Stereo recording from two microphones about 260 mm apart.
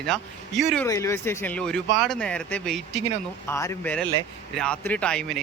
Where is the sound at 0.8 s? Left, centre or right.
Centre.